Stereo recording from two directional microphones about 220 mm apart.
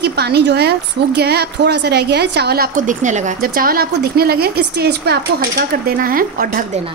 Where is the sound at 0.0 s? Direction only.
50° right (ahead or behind).